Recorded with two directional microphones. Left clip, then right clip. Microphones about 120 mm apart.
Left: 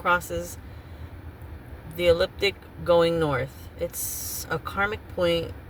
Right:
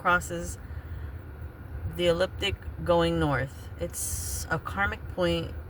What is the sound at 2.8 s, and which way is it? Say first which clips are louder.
Speech: left 4 dB; 20° right (ahead or behind).